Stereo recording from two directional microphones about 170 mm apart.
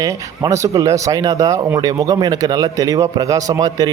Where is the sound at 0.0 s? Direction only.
20° right (ahead or behind).